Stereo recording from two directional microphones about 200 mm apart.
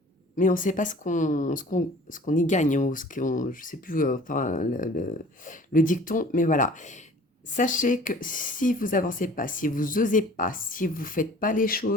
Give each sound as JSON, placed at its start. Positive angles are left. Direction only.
{"t": 0.3, "sound": "speech", "side_deg": 40}